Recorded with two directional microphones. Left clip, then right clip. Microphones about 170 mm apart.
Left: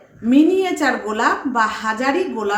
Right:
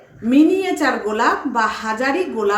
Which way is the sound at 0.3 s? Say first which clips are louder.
Even; 5° left (ahead or behind).